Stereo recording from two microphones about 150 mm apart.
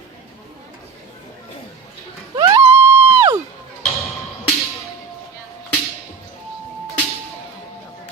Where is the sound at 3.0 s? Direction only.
35° right (ahead or behind).